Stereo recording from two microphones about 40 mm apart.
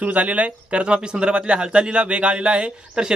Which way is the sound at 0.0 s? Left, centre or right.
Right.